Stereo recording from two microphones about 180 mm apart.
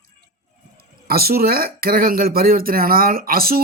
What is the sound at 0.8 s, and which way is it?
Speech, 55° right (ahead or behind).